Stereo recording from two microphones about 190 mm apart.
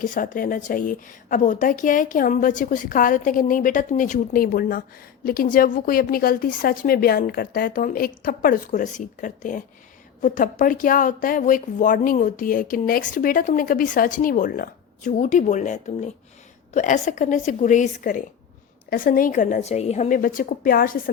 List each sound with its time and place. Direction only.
0.0 s a woman's voice: 45° left (ahead or behind)